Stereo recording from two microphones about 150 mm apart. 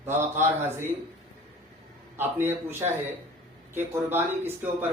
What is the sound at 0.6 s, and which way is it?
Speech, 15° right (ahead or behind).